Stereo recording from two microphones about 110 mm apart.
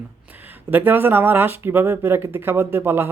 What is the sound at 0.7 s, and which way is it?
Speech, 20° right (ahead or behind).